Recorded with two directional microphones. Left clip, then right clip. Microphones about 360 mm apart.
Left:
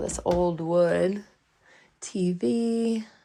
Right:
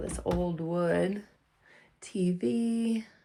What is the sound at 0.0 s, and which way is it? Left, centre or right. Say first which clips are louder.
Speech: left 7 dB; centre.